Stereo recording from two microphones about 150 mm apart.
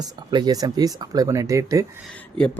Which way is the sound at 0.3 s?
25° right (ahead or behind).